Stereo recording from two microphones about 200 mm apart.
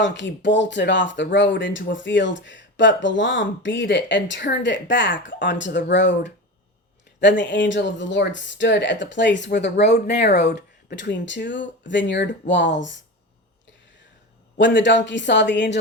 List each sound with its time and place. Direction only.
0.0 s speech: 65° left (ahead or behind)
14.6 s speech: 65° left (ahead or behind)